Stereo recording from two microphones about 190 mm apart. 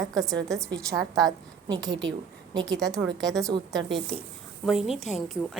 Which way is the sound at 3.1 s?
Centre (ahead or behind).